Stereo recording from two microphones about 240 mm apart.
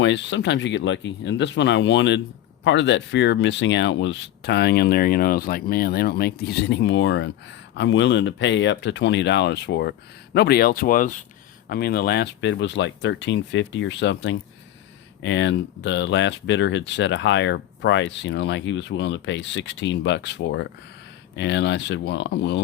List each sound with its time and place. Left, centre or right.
0.0 s speech: left